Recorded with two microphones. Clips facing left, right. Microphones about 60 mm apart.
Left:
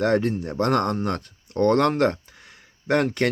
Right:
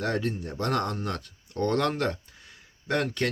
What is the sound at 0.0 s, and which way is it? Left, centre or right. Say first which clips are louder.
Speech: left 8 dB; left.